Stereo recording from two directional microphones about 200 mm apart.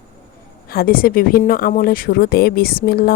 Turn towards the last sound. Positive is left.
turn(degrees=50)  # may be behind; listen again after turning